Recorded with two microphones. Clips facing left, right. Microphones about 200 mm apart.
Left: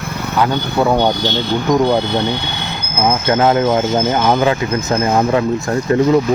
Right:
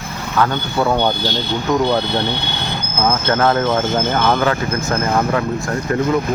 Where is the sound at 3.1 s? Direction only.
15° left (ahead or behind).